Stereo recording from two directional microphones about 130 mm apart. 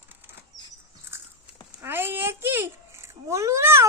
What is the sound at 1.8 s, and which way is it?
A child's voice, 15° right (ahead or behind).